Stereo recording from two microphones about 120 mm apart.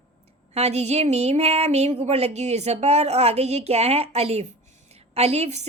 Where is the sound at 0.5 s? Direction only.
65° right (ahead or behind).